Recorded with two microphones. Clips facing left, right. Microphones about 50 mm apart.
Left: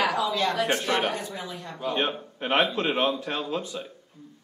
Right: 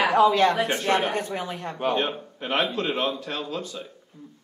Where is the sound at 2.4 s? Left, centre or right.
Left.